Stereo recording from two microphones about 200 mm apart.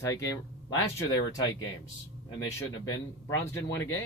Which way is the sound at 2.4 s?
15° left (ahead or behind).